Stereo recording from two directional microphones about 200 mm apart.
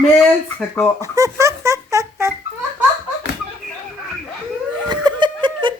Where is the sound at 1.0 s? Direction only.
15° right (ahead or behind).